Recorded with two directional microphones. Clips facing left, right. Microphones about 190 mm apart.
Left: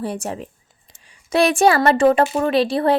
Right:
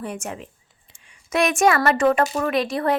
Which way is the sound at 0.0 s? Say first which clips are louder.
Left 5 dB; 35° left (ahead or behind).